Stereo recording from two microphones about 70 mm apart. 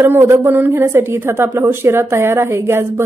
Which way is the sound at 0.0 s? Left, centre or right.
Right.